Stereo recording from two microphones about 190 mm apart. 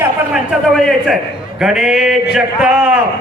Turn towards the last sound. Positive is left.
turn(degrees=-5)  # may be behind; listen again after turning